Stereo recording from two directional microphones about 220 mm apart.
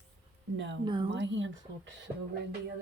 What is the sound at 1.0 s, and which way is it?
Speech, 55° right (ahead or behind).